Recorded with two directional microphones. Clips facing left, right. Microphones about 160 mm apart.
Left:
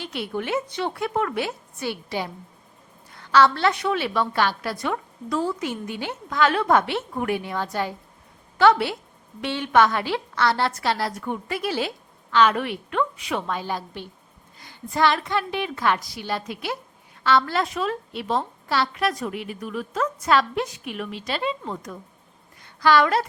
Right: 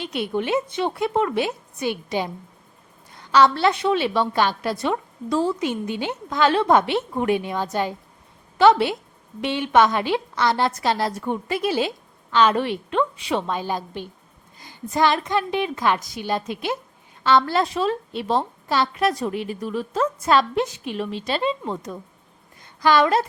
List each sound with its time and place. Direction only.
0.0 s a woman's voice: 20° right (ahead or behind)
3.2 s a sound: 15° right (ahead or behind)
3.5 s a woman's voice: 25° right (ahead or behind)